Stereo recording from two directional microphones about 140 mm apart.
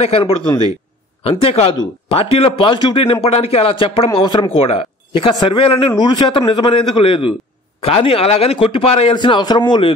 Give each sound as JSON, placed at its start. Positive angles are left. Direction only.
{"t": 0.0, "sound": "speech", "side_deg": 40}
{"t": 9.1, "sound": "speech", "side_deg": 35}